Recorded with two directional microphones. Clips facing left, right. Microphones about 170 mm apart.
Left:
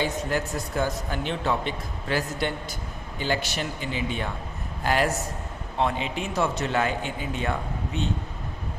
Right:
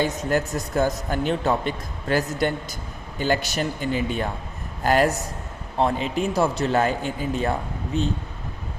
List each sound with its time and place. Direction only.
0.0 s a man's voice: 45° right (ahead or behind)